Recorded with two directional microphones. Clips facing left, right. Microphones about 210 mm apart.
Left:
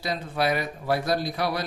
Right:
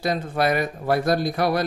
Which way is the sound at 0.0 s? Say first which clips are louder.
Right 4 dB; 50° right (ahead or behind).